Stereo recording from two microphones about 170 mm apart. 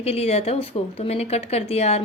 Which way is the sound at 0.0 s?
35° left (ahead or behind).